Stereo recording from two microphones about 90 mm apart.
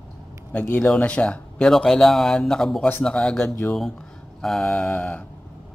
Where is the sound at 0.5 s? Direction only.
20° left (ahead or behind).